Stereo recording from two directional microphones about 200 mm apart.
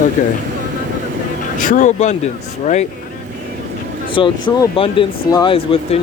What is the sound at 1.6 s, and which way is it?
Speech, 40° left (ahead or behind).